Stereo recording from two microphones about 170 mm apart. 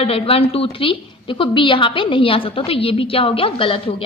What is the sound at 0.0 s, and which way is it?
A woman's voice, 35° left (ahead or behind).